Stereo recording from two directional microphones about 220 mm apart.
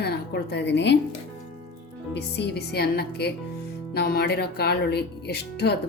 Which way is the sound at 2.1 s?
50° left (ahead or behind).